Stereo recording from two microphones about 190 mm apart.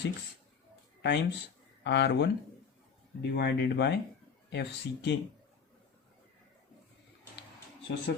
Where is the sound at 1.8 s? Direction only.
65° left (ahead or behind).